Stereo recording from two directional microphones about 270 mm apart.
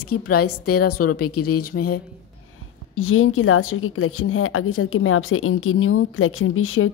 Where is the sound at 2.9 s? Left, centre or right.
Left.